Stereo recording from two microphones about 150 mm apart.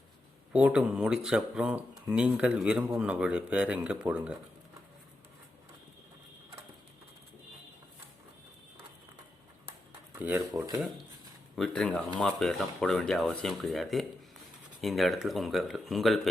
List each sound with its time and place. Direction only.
0.5 s speech: 5° right (ahead or behind)
10.2 s speech: 15° right (ahead or behind)
11.5 s speech: 5° left (ahead or behind)